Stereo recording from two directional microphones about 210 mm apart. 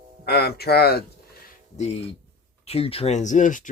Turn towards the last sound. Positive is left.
turn(degrees=40)  # may be behind; listen again after turning